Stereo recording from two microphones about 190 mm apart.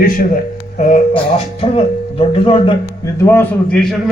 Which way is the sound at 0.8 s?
40° left (ahead or behind).